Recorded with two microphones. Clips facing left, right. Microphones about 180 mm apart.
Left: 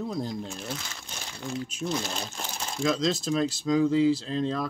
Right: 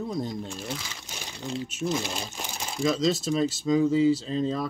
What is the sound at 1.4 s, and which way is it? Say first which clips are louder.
Speech: right 1 dB; 20° right (ahead or behind).